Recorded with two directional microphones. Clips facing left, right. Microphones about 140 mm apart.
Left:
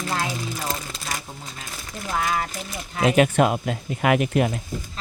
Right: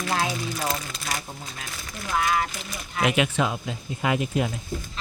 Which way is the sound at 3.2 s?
55° left (ahead or behind).